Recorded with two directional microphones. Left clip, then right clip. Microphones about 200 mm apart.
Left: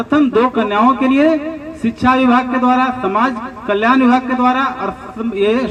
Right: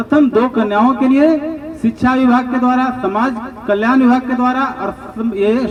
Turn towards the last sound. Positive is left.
turn(degrees=-55)  # may be behind; listen again after turning